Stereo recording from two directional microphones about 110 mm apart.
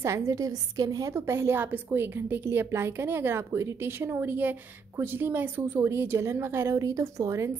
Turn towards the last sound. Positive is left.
turn(degrees=-30)  # may be behind; listen again after turning